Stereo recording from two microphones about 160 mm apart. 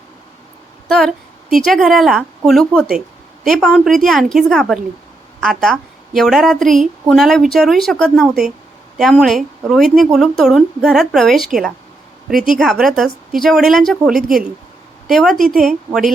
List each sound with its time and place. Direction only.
0.9 s a woman's voice: centre (ahead or behind)
12.3 s a woman's voice: 60° right (ahead or behind)
12.7 s a woman's voice: centre (ahead or behind)